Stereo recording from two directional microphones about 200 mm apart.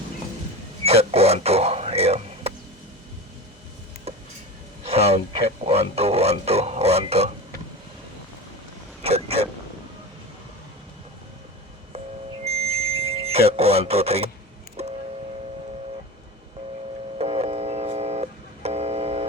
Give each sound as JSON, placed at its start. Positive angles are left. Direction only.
{"t": 0.9, "sound": "a sound", "side_deg": -30}
{"t": 4.1, "sound": "a sound", "side_deg": -30}
{"t": 9.0, "sound": "vehicle", "side_deg": -30}
{"t": 12.5, "sound": "smoke detector", "side_deg": -30}
{"t": 14.8, "sound": "vehicle", "side_deg": -30}
{"t": 17.2, "sound": "music", "side_deg": -30}